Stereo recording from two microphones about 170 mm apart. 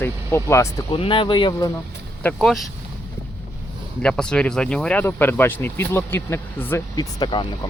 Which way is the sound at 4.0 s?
5° left (ahead or behind).